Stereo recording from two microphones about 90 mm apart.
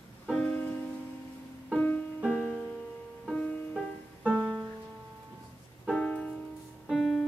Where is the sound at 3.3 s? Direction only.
15° left (ahead or behind).